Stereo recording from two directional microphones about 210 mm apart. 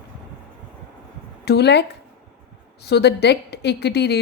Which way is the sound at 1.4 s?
50° left (ahead or behind).